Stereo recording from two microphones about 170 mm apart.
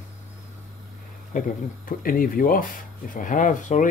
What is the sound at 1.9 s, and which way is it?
Speech, 55° left (ahead or behind).